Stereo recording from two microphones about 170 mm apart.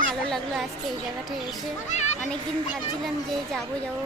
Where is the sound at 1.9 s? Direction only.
40° left (ahead or behind).